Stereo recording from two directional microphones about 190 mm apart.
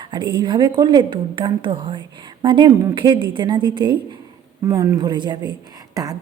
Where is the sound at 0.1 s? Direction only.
25° right (ahead or behind).